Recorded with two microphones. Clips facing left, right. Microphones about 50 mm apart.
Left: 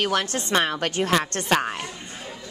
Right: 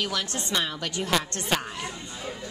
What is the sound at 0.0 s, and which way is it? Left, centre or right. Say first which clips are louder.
A woman's voice: left 6 dB; left.